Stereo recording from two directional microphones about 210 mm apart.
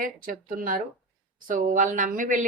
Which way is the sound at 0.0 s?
40° right (ahead or behind).